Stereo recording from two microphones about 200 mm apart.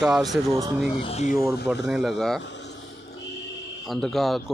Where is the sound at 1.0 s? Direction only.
30° left (ahead or behind).